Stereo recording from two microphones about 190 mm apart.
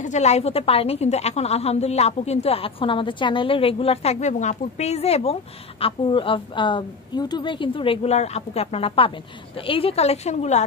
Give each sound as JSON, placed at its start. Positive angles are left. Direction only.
{"t": 0.0, "sound": "a woman's voice", "side_deg": 35}